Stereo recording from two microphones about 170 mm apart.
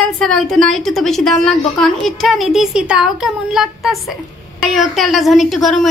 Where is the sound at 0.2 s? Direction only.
5° left (ahead or behind).